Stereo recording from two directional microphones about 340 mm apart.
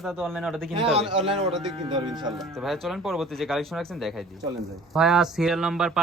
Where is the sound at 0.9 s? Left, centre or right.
Centre.